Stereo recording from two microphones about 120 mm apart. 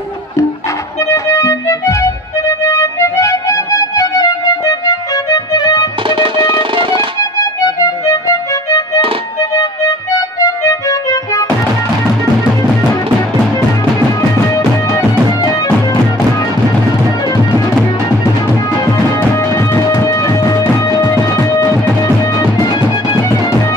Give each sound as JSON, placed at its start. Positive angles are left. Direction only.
{"t": 1.0, "sound": "music", "side_deg": 25}
{"t": 6.0, "sound": "music", "side_deg": -45}
{"t": 7.2, "sound": "music", "side_deg": 30}
{"t": 14.5, "sound": "music", "side_deg": 30}
{"t": 19.3, "sound": "music", "side_deg": 25}